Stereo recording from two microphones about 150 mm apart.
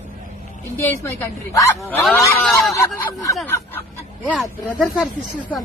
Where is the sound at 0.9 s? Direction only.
15° left (ahead or behind).